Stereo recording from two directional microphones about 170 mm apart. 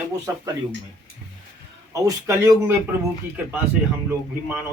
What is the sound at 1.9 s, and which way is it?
Speech, 20° right (ahead or behind).